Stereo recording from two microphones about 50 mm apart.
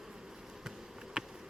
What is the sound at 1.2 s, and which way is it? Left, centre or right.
Insect, centre.